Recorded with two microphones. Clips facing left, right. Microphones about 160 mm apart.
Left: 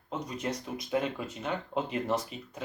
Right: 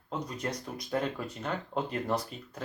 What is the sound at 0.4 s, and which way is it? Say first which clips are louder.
Speech: left 1 dB; 10° left (ahead or behind).